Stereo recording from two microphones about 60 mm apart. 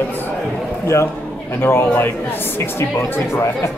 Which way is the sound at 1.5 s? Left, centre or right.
Left.